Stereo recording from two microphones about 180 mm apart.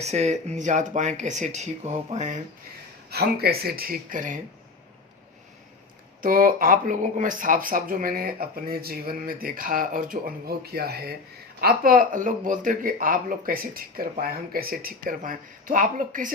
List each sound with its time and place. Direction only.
0.0 s speech: 40° right (ahead or behind)
3.1 s speech: 60° right (ahead or behind)
6.2 s speech: 50° right (ahead or behind)